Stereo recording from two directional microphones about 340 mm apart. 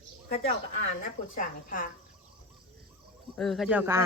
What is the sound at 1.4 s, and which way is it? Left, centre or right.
Speech, left.